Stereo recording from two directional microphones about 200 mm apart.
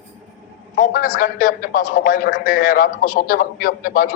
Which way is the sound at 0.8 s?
45° left (ahead or behind).